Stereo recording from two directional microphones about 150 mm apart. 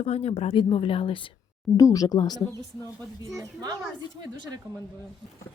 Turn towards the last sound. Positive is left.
turn(degrees=-25)  # may be behind; listen again after turning